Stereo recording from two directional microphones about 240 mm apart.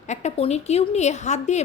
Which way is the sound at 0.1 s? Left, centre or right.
Left.